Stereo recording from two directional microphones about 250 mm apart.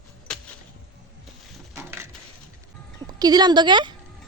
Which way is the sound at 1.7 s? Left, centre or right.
Centre.